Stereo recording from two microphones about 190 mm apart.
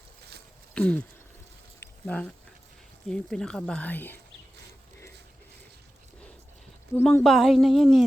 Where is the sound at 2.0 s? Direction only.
5° left (ahead or behind).